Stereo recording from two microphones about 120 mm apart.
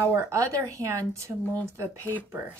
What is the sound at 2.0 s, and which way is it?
Speech, 15° left (ahead or behind).